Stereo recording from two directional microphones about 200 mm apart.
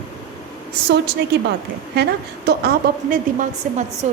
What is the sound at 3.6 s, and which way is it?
Speech, 35° right (ahead or behind).